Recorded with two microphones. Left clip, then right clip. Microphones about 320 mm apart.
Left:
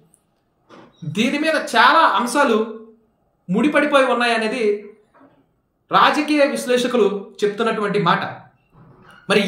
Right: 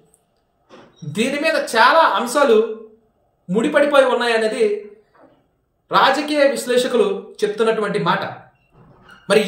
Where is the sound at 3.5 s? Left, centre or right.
Centre.